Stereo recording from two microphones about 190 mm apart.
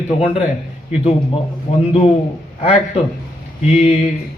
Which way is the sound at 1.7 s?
30° left (ahead or behind).